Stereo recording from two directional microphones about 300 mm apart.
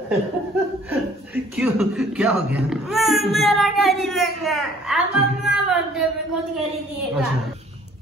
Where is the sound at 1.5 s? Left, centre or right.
Centre.